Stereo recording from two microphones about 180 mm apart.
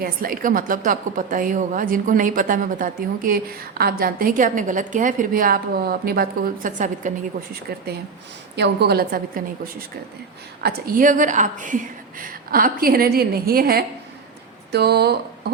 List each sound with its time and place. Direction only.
0.0 s a woman's voice: 50° right (ahead or behind)
8.5 s a woman's voice: 70° right (ahead or behind)
10.6 s a woman's voice: 55° right (ahead or behind)